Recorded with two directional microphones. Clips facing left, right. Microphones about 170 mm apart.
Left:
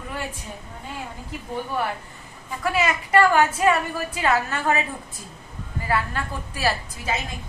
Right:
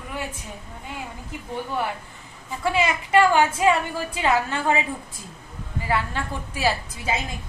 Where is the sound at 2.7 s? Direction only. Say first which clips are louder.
Even; 20° right (ahead or behind).